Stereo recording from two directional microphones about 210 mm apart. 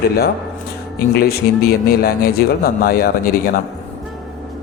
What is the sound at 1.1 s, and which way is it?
A man's voice, 45° left (ahead or behind).